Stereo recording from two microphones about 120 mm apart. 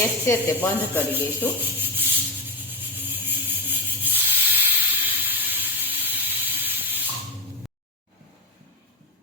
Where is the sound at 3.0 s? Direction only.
15° right (ahead or behind).